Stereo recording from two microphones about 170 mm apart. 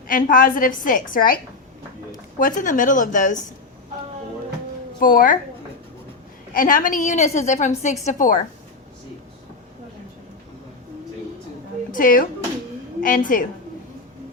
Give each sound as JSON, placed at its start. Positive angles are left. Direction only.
{"t": 0.1, "sound": "a woman's voice", "side_deg": 50}
{"t": 2.4, "sound": "a woman's voice", "side_deg": 50}
{"t": 4.9, "sound": "a woman's voice", "side_deg": 55}
{"t": 6.5, "sound": "a woman's voice", "side_deg": 55}
{"t": 11.9, "sound": "a woman's voice", "side_deg": 55}